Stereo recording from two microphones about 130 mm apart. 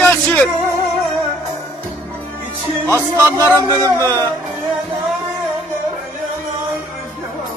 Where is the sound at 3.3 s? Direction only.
20° right (ahead or behind).